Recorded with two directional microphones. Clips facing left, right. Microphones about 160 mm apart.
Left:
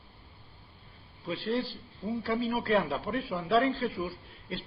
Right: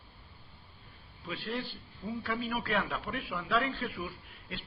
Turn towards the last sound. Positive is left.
turn(degrees=30)  # may be behind; listen again after turning